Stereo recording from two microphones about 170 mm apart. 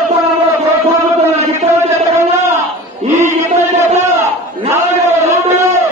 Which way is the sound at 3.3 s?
45° right (ahead or behind).